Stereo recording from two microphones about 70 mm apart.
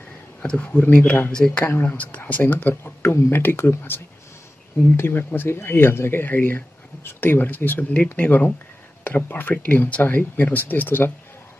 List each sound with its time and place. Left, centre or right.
0.4 s speech: left
1.3 s speech: centre